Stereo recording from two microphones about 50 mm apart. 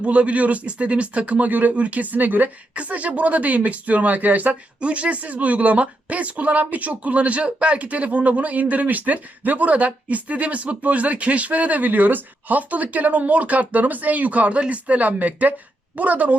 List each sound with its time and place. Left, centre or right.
0.0 s speech: right